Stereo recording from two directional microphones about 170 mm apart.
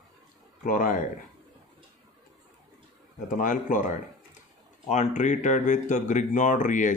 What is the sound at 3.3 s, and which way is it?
Speech, 50° left (ahead or behind).